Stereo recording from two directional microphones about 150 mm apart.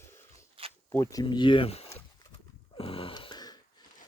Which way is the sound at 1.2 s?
30° left (ahead or behind).